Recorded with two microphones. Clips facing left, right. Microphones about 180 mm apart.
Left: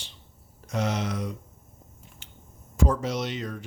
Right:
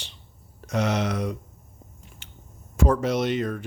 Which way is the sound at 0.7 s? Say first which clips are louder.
Right 4 dB; 70° right (ahead or behind).